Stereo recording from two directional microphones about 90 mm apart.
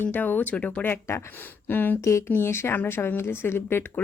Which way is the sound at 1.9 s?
35° left (ahead or behind).